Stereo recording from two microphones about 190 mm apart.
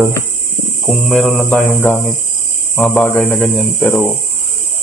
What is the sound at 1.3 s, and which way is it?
Mantra, 10° left (ahead or behind).